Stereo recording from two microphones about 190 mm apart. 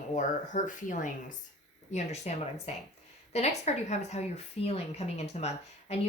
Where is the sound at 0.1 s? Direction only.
40° left (ahead or behind).